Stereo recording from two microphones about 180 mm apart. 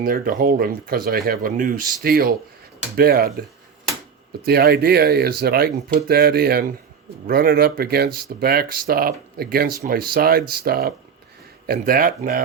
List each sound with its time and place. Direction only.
0.0 s speech: 50° right (ahead or behind)
4.4 s speech: 60° right (ahead or behind)